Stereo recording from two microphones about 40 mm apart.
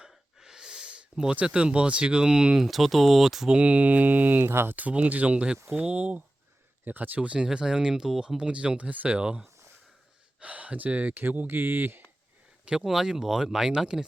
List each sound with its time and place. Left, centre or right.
0.1 s gasp: centre
1.5 s speech: right
2.6 s speech: centre
3.6 s mantra: right
4.5 s speech: right
4.8 s mantra: right
5.3 s speech: right
6.8 s mantra: right
7.2 s speech: right
7.4 s speech: centre
8.4 s speech: right
10.4 s speech: right
11.1 s speech: right
12.8 s speech: centre